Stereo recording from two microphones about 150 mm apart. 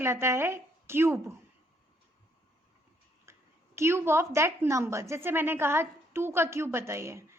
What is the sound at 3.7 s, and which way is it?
A woman's voice, 15° right (ahead or behind).